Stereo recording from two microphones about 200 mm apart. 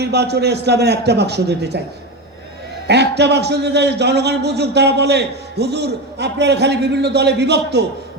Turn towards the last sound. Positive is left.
turn(degrees=-55)  # may be behind; listen again after turning